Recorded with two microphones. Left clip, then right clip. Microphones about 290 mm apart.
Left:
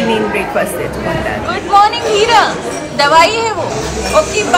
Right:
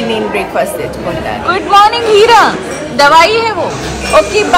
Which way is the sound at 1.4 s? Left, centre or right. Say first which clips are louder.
Right 3 dB; centre.